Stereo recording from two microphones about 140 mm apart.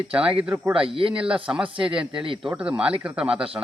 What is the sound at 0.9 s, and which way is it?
Speech, 40° right (ahead or behind).